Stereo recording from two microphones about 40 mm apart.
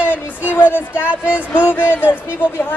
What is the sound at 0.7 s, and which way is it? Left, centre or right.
Speech, left.